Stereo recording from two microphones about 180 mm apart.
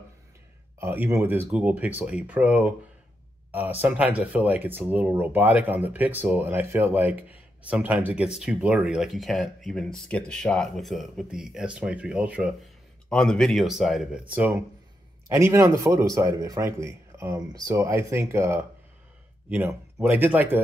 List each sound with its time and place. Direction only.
0.7 s speech: 10° right (ahead or behind)
3.8 s speech: 10° right (ahead or behind)
13.1 s speech: 5° left (ahead or behind)